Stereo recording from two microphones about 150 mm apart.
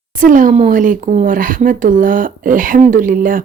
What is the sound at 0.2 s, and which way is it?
Speech, 60° right (ahead or behind).